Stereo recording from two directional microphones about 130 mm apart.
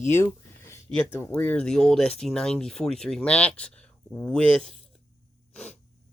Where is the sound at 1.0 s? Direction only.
20° left (ahead or behind).